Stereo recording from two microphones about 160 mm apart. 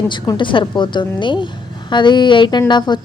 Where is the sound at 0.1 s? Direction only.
30° left (ahead or behind).